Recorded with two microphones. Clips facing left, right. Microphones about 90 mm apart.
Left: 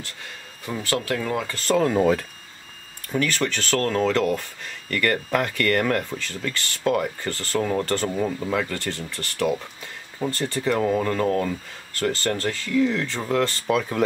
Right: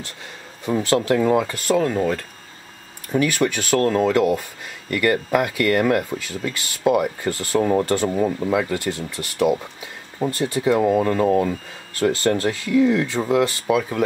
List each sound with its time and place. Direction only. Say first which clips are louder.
0.7 s speech: right 7 dB; 20° right (ahead or behind)
1.7 s speech: left 2 dB; centre (ahead or behind)
3.1 s speech: right 4 dB; 10° right (ahead or behind)